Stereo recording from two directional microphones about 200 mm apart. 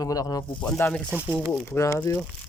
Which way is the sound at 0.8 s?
5° left (ahead or behind).